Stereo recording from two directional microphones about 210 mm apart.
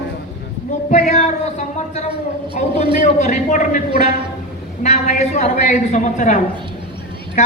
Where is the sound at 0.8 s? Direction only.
35° left (ahead or behind).